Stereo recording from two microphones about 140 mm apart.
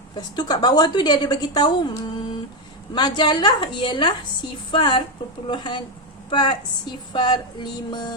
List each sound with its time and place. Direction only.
0.2 s a woman's voice: 30° left (ahead or behind)